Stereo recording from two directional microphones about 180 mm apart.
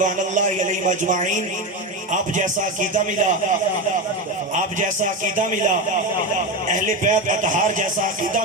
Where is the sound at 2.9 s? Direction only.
40° right (ahead or behind).